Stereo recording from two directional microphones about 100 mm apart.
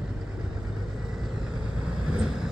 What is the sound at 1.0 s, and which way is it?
Vehicle, 5° right (ahead or behind).